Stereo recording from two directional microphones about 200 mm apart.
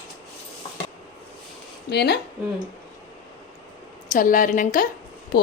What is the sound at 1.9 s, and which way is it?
Speech, 55° left (ahead or behind).